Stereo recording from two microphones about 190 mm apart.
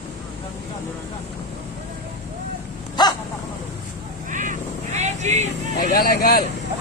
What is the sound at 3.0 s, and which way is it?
Dog, 20° left (ahead or behind).